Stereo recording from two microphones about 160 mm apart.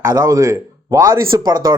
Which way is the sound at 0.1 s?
20° right (ahead or behind).